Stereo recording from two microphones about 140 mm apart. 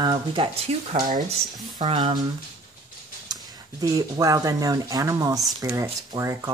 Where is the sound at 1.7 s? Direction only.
30° right (ahead or behind).